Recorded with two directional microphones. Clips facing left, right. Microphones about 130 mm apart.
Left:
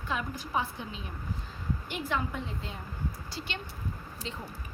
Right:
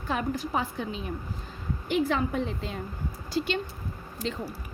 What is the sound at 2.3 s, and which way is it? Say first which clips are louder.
Speech: right 7 dB; 75° right (ahead or behind).